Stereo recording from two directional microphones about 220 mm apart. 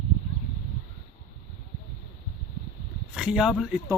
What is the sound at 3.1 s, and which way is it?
Speech, 5° right (ahead or behind).